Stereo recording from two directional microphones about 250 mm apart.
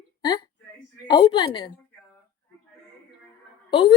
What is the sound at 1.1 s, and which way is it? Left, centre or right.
Speech, centre.